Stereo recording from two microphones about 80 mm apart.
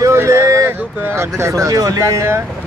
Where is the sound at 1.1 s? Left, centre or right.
Right.